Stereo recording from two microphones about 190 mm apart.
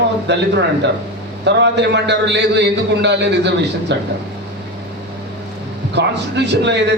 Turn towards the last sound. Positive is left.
turn(degrees=-65)  # may be behind; listen again after turning